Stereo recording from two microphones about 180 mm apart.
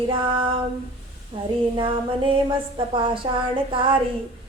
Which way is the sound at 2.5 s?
30° right (ahead or behind).